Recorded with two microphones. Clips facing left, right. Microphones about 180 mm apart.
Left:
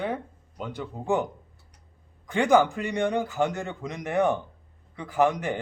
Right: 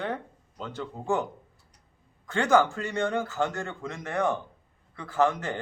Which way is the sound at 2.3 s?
15° left (ahead or behind).